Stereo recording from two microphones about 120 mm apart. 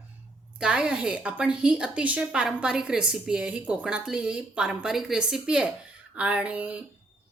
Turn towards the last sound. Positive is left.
turn(degrees=-10)  # may be behind; listen again after turning